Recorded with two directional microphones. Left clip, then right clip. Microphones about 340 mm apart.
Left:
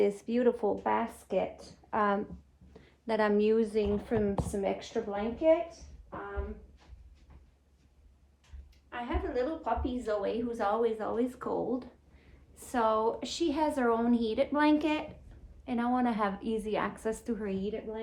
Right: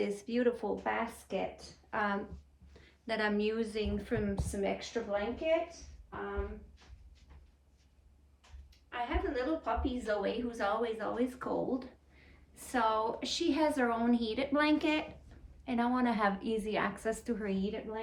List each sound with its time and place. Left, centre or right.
0.0 s a woman's voice: centre
8.9 s a woman's voice: centre